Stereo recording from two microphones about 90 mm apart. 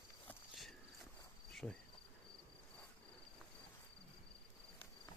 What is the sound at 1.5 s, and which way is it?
Insect, 5° left (ahead or behind).